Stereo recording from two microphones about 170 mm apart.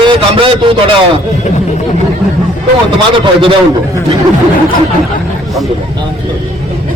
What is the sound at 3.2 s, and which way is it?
Speech, 30° right (ahead or behind).